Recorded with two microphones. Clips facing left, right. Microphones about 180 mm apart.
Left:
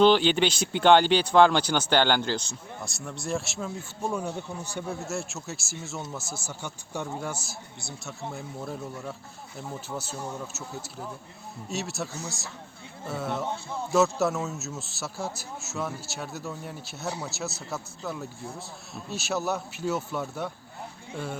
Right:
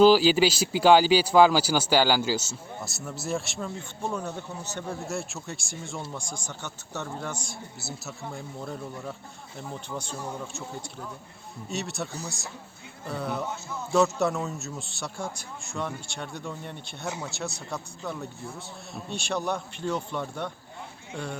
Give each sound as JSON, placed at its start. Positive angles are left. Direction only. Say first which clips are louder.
{"t": 0.0, "sound": "a man's voice", "louder": "right 2 dB", "side_deg": -5}
{"t": 7.8, "sound": "speech", "louder": "left 1 dB", "side_deg": -5}
{"t": 11.7, "sound": "speech", "louder": "even", "side_deg": 0}
{"t": 13.1, "sound": "speech", "louder": "even", "side_deg": 0}
{"t": 13.4, "sound": "speech", "louder": "left 1 dB", "side_deg": 30}
{"t": 13.9, "sound": "speech", "louder": "even", "side_deg": 0}